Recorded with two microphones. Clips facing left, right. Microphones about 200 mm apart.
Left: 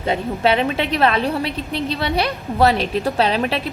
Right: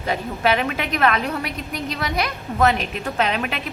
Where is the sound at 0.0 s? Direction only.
25° left (ahead or behind).